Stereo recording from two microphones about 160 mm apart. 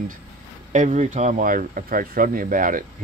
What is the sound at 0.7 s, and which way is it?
Speech, 50° right (ahead or behind).